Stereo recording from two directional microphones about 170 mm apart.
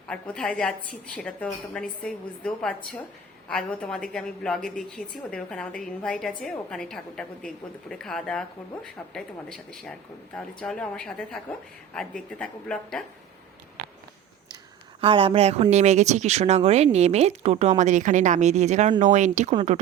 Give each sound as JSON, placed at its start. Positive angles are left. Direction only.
{"t": 0.1, "sound": "a woman's voice", "side_deg": 5}
{"t": 15.0, "sound": "speech", "side_deg": -30}